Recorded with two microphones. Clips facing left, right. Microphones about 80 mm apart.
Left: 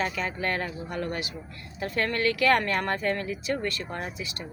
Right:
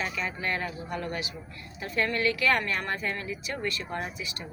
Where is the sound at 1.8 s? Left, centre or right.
Left.